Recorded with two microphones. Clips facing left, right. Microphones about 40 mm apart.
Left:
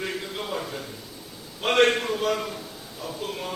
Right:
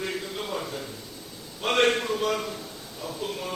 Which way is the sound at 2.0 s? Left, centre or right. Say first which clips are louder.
Left 1 dB; centre.